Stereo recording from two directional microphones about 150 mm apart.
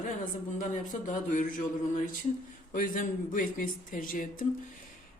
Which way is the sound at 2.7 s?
65° left (ahead or behind).